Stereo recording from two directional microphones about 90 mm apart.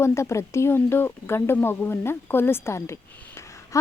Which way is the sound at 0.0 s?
35° left (ahead or behind).